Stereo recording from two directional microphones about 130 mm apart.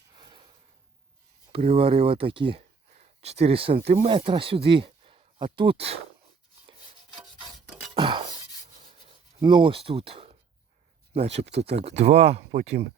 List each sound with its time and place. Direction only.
0.1 s a sound: 35° right (ahead or behind)
1.5 s speech: 45° right (ahead or behind)
2.9 s speech: 60° right (ahead or behind)
7.4 s music: centre (ahead or behind)
7.9 s a sound: 40° right (ahead or behind)
8.8 s rub: 45° right (ahead or behind)
9.4 s speech: 35° right (ahead or behind); by 12.8 s 55° right (ahead or behind)